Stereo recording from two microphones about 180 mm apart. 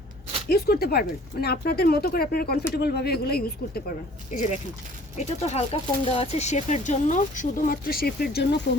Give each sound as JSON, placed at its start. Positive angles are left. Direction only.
{"t": 0.4, "sound": "speech", "side_deg": 60}
{"t": 4.3, "sound": "speech", "side_deg": 45}
{"t": 8.7, "sound": "speech", "side_deg": 80}